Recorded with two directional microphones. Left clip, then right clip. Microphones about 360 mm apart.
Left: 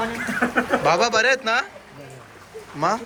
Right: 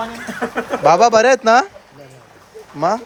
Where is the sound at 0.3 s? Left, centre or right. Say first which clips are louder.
Even; right.